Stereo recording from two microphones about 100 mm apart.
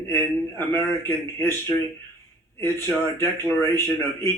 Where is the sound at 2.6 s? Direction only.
25° left (ahead or behind).